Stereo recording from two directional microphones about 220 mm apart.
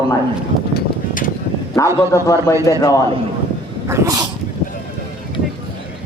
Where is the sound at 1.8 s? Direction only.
15° left (ahead or behind).